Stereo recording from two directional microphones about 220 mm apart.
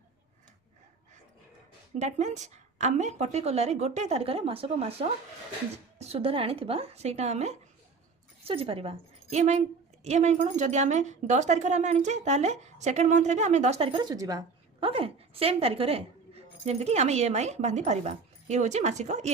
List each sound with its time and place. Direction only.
2.0 s a woman's voice: 30° right (ahead or behind)